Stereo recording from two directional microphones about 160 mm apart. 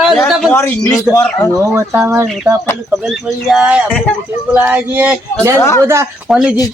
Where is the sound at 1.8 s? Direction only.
15° right (ahead or behind).